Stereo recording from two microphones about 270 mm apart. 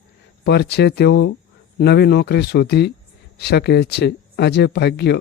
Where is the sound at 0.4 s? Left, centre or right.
Left.